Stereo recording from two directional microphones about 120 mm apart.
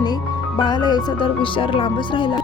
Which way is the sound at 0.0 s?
40° left (ahead or behind).